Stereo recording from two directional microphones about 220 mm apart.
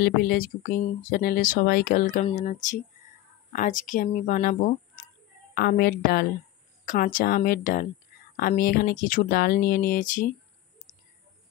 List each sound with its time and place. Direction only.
0.0 s a woman's voice: 45° left (ahead or behind)